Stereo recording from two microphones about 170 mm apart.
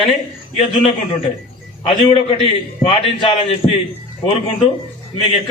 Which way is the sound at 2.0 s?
30° left (ahead or behind).